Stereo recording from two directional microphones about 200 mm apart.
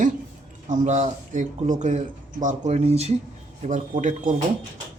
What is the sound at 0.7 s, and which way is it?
Speech, 35° right (ahead or behind).